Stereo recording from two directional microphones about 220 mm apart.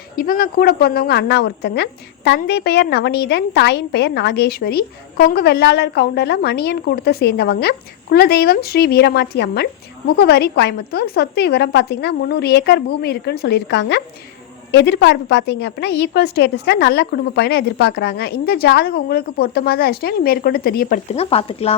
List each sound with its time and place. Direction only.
0.2 s a woman's voice: 40° left (ahead or behind)